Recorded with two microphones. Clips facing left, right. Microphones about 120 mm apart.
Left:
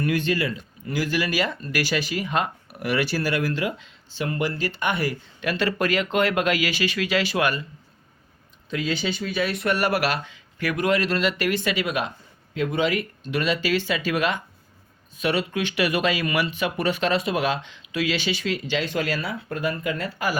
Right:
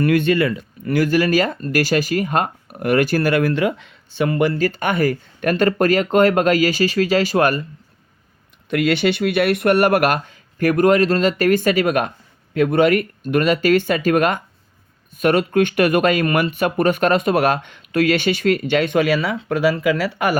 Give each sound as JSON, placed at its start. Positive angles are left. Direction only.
{"t": 0.0, "sound": "speech", "side_deg": -60}
{"t": 8.7, "sound": "speech", "side_deg": -65}